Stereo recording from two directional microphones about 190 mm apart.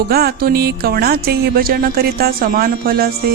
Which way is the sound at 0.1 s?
55° right (ahead or behind).